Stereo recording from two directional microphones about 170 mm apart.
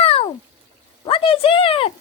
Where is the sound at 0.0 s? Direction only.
35° left (ahead or behind).